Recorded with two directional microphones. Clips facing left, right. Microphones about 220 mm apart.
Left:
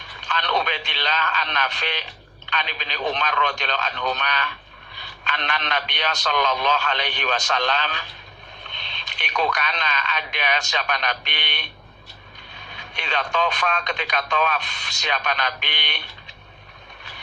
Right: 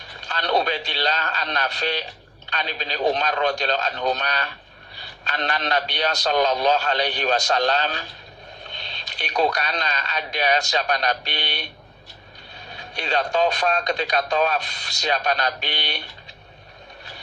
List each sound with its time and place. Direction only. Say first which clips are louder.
0.2 s a man's voice: right 3 dB; 40° right (ahead or behind)
12.7 s a man's voice: right 4 dB; 35° right (ahead or behind)